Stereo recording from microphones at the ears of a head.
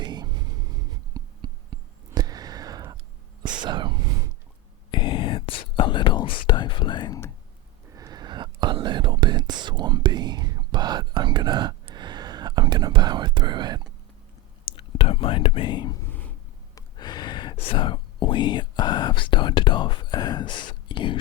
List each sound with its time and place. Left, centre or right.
0.0 s a sound: right
3.4 s whispering: right
4.9 s whispering: left
7.9 s whispering: right
14.6 s whispering: left